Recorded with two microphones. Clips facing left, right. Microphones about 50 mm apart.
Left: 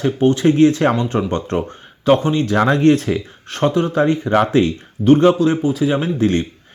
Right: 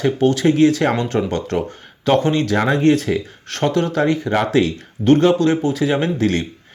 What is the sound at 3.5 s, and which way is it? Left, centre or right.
Speech, centre.